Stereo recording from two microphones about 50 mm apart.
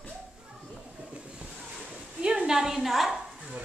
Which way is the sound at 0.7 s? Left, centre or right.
Centre.